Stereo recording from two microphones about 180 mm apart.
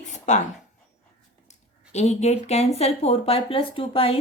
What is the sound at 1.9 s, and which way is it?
Speech, 40° left (ahead or behind).